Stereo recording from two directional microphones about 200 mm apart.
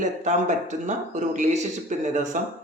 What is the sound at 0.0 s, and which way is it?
Speech, 35° right (ahead or behind).